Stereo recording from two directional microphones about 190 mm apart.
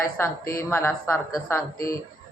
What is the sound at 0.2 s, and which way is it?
A man's voice, 10° left (ahead or behind).